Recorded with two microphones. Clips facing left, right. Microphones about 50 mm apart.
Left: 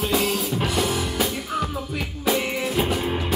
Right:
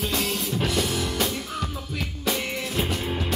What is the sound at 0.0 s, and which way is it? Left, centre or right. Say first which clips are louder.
Music: left 4 dB; centre.